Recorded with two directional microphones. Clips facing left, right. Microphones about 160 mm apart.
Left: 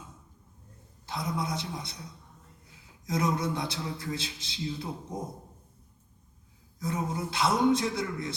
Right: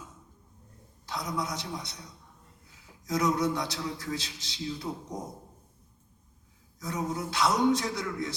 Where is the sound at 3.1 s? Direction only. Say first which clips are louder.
Right 2 dB; 25° left (ahead or behind).